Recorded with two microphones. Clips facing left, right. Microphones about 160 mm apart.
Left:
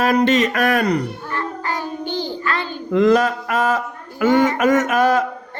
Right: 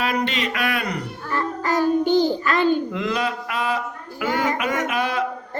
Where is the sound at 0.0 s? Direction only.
40° left (ahead or behind).